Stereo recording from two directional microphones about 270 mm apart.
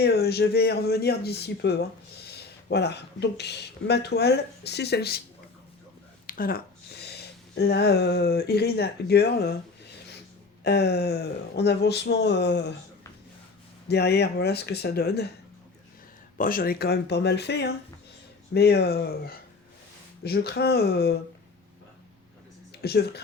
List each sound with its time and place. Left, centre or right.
0.0 s speech: left
6.2 s speech: left
10.6 s speech: left
13.8 s speech: left
16.4 s speech: left
22.7 s speech: left